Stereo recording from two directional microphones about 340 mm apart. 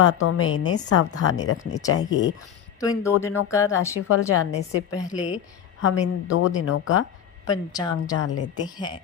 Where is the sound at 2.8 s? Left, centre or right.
Centre.